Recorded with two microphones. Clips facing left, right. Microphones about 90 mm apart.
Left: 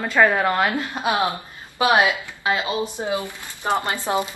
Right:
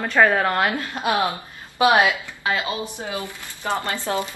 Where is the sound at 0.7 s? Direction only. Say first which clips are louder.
Even; 20° left (ahead or behind).